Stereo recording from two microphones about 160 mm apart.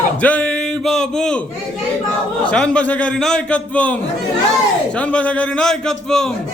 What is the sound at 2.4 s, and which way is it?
A man's voice, 5° left (ahead or behind).